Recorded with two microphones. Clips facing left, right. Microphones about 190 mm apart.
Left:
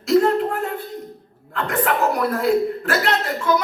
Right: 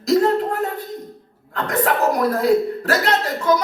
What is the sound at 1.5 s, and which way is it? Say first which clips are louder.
Speech: right 1 dB; 40° right (ahead or behind).